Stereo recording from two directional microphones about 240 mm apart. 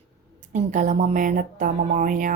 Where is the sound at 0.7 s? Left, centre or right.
Right.